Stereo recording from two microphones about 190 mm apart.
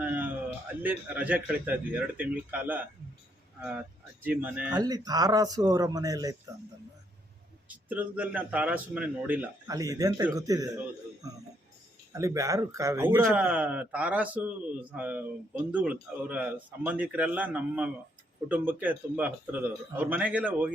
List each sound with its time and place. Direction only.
0.0 s a sound: 10° right (ahead or behind)
0.8 s a man's voice: 10° right (ahead or behind)
4.2 s a man's voice: 10° right (ahead or behind)
4.8 s speech: 20° right (ahead or behind)
7.7 s a man's voice: 10° right (ahead or behind)